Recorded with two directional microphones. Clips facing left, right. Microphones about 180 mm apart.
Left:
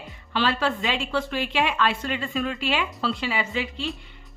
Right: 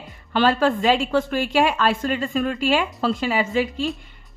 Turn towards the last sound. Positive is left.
turn(degrees=-45)  # may be behind; listen again after turning